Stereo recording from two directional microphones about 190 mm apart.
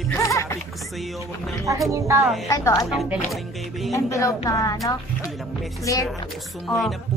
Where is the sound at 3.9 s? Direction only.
15° left (ahead or behind).